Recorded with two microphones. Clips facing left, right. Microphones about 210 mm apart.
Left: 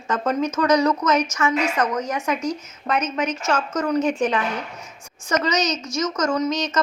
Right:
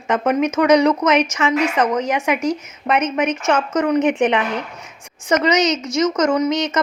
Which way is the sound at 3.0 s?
55° right (ahead or behind).